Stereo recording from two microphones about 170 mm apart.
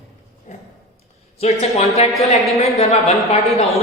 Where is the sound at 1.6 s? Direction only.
40° left (ahead or behind).